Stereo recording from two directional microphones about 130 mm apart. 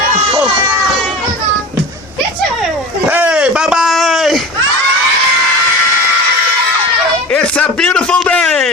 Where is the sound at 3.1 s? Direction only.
10° right (ahead or behind).